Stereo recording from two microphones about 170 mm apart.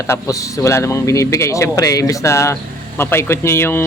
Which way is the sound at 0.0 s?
15° left (ahead or behind).